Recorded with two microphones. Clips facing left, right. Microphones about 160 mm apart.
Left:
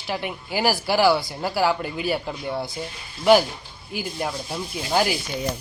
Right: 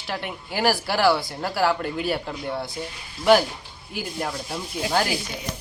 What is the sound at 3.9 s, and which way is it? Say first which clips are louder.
Speech: left 1 dB; 5° left (ahead or behind).